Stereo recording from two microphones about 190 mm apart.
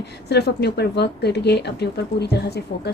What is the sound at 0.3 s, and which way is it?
Speech, 60° left (ahead or behind).